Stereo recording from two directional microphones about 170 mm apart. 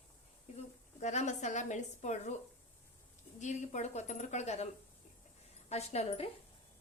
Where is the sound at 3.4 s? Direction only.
45° left (ahead or behind).